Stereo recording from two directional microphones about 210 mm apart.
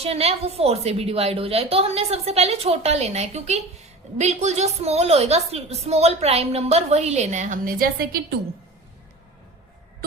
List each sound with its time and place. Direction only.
0.0 s a woman's voice: 30° right (ahead or behind); by 8.4 s 45° right (ahead or behind)